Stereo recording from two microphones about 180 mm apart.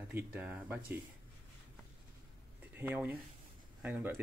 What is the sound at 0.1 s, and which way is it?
Speech, 5° right (ahead or behind).